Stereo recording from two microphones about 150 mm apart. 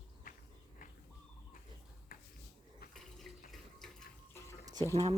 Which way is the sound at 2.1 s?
75° left (ahead or behind).